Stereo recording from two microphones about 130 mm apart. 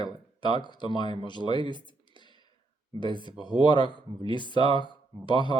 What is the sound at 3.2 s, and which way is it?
Speech, 35° left (ahead or behind).